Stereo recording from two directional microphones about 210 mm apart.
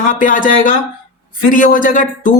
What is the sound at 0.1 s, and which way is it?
Speech, 40° left (ahead or behind).